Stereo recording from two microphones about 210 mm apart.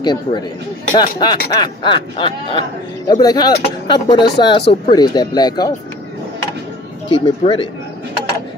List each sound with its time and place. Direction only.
0.0 s speech: 20° left (ahead or behind)
7.1 s speech: 25° left (ahead or behind)